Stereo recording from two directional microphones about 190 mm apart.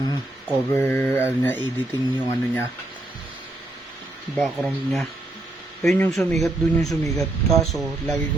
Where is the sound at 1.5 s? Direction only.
20° right (ahead or behind).